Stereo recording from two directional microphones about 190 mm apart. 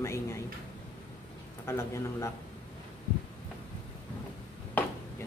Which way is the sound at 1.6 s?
15° left (ahead or behind).